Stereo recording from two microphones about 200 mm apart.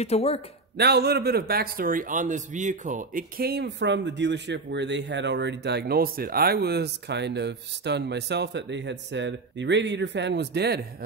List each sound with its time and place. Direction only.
0.0 s speech: 30° left (ahead or behind)
0.7 s a man's voice: 55° right (ahead or behind)